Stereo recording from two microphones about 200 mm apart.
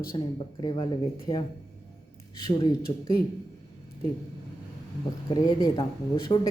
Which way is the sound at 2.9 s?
20° left (ahead or behind).